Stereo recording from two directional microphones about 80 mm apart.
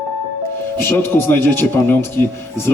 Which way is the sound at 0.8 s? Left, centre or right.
Left.